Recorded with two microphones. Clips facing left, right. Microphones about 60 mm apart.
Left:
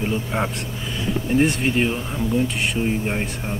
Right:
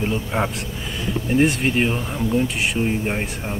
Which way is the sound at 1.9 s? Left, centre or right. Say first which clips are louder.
Right 1 dB; right.